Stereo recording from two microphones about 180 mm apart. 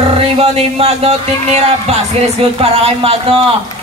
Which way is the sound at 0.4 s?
35° right (ahead or behind).